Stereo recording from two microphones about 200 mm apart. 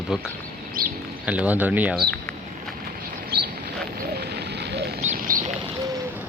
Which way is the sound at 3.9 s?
50° right (ahead or behind).